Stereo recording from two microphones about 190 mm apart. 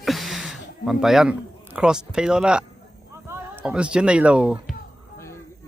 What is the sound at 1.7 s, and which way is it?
Speech, 5° right (ahead or behind).